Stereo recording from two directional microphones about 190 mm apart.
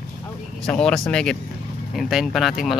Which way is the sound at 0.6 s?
5° left (ahead or behind).